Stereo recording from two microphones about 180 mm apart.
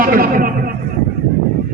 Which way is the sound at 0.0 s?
55° right (ahead or behind).